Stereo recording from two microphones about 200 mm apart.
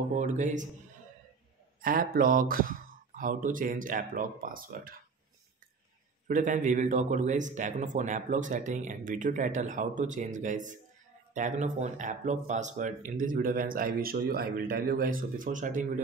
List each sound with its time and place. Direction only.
0.1 s speech: 40° right (ahead or behind)
1.8 s speech: 45° right (ahead or behind)
6.2 s speech: 40° right (ahead or behind)